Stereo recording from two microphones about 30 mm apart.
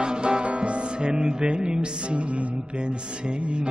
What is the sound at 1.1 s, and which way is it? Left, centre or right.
Music, right.